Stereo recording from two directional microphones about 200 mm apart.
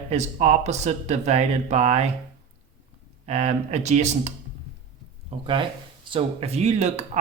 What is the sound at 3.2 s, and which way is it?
Speech, 35° right (ahead or behind).